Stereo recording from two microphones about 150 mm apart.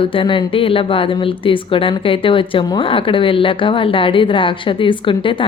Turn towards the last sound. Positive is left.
turn(degrees=35)  # may be behind; listen again after turning